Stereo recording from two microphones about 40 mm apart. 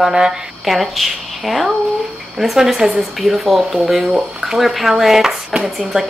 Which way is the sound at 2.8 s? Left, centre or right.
Centre.